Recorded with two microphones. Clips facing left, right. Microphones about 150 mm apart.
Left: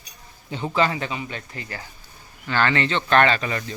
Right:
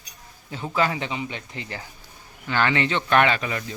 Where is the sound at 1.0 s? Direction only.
20° right (ahead or behind).